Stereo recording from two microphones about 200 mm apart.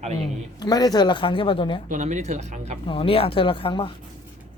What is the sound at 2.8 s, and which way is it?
Speech, 25° left (ahead or behind).